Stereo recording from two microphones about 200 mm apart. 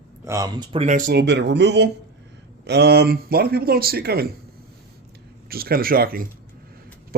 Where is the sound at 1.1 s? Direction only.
60° right (ahead or behind).